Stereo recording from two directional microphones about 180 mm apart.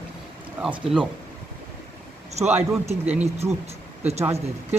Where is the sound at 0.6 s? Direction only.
Centre (ahead or behind).